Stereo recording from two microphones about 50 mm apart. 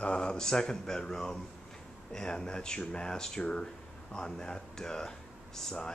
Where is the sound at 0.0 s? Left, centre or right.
Centre.